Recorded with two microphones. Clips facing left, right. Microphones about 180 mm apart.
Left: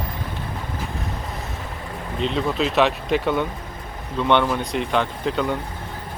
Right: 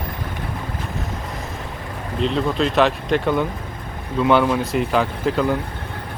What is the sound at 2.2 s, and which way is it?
Speech, centre (ahead or behind).